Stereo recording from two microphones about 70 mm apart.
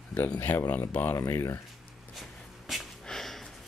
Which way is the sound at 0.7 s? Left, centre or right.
Left.